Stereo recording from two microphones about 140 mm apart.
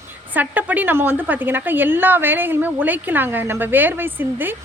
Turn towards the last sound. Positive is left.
turn(degrees=-15)  # may be behind; listen again after turning